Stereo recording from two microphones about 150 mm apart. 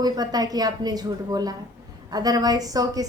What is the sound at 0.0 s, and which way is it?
A woman's voice, 25° right (ahead or behind).